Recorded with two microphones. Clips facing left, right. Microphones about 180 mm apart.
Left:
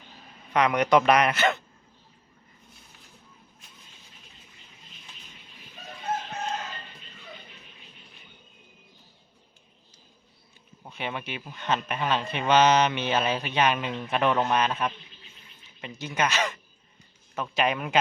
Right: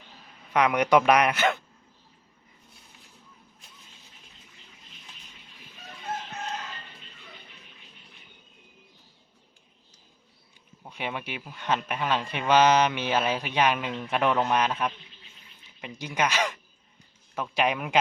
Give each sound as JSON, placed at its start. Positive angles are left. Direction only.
{"t": 0.5, "sound": "a man's voice", "side_deg": -10}
{"t": 10.8, "sound": "a man's voice", "side_deg": -10}